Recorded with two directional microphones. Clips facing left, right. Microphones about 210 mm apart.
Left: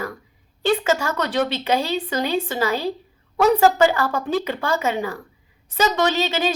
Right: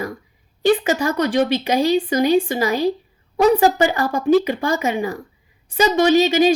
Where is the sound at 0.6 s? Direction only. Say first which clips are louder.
Right 3 dB; 15° right (ahead or behind).